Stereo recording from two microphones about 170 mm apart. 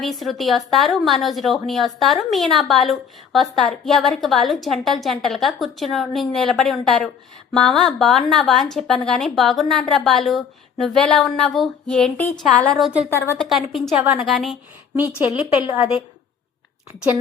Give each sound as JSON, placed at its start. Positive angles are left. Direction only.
{"t": 0.0, "sound": "a woman's voice", "side_deg": 0}
{"t": 13.1, "sound": "speech", "side_deg": 15}
{"t": 13.4, "sound": "a woman's voice", "side_deg": 0}